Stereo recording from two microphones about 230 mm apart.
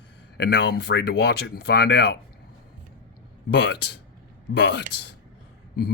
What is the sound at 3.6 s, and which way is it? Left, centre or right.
Speech, left.